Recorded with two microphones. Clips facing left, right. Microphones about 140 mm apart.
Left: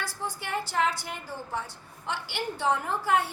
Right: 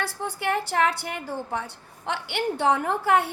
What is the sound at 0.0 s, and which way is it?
A woman's voice, 65° right (ahead or behind).